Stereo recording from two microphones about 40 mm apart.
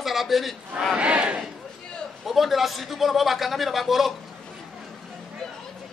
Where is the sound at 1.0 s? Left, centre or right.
Right.